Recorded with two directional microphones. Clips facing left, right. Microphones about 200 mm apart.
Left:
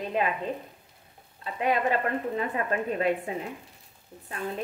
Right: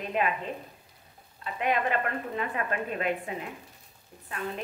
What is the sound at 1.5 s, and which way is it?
A woman's voice, 35° left (ahead or behind).